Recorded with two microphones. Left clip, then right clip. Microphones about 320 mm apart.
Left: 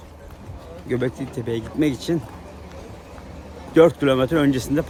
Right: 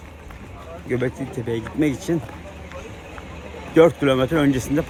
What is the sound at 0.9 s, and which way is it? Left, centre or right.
Speech, centre.